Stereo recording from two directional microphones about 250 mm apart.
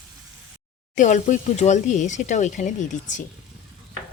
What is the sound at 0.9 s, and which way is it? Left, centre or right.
Speech, left.